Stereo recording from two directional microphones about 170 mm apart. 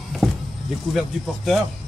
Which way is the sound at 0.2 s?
Centre (ahead or behind).